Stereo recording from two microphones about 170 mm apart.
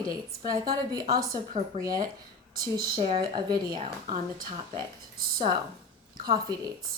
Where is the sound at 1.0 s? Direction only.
60° right (ahead or behind).